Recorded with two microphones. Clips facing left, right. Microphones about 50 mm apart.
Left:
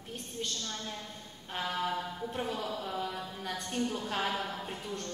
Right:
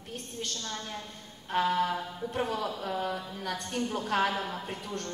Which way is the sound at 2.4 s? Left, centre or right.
Right.